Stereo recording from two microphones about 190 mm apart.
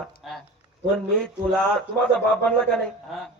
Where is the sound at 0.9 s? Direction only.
5° left (ahead or behind).